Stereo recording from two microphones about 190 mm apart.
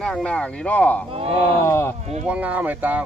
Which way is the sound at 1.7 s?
15° left (ahead or behind).